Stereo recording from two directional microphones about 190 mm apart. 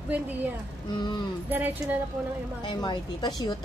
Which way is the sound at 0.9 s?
25° left (ahead or behind).